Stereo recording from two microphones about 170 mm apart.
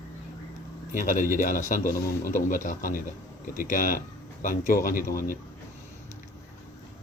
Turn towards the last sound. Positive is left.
turn(degrees=55)  # may be behind; listen again after turning